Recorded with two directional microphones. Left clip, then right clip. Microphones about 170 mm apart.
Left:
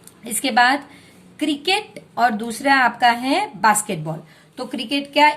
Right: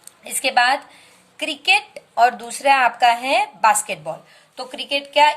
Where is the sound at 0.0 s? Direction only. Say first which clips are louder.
Right 2 dB; 20° right (ahead or behind).